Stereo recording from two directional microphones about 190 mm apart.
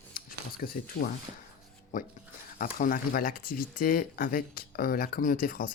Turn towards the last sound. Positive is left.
turn(degrees=45)  # may be behind; listen again after turning